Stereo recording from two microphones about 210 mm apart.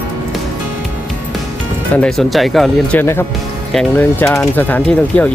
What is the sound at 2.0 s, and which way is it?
Speech, centre (ahead or behind).